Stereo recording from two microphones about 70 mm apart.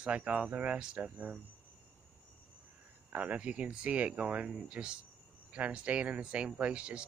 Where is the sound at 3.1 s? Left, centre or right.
Centre.